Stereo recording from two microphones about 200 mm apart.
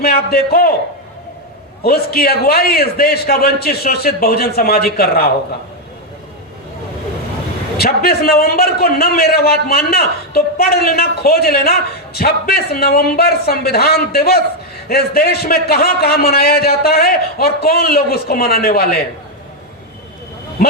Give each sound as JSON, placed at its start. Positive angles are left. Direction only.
{"t": 0.0, "sound": "a man's voice", "side_deg": 50}
{"t": 1.8, "sound": "a man's voice", "side_deg": 50}
{"t": 7.8, "sound": "a man's voice", "side_deg": 50}